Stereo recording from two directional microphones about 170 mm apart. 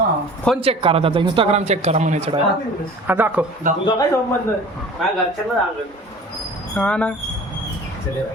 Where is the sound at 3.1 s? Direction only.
10° right (ahead or behind).